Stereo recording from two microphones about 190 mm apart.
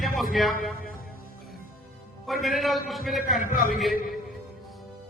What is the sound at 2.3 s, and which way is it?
A man's voice, centre (ahead or behind).